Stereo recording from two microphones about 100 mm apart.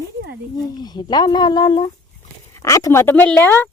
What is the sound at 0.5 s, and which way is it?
Speech, 40° left (ahead or behind).